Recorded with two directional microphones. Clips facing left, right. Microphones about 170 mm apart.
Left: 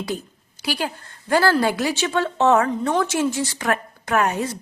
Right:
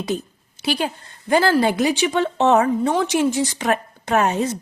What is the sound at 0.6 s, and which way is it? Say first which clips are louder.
A woman's voice: right 3 dB; 20° right (ahead or behind).